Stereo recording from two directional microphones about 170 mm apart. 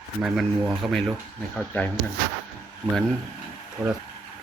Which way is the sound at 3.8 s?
Centre (ahead or behind).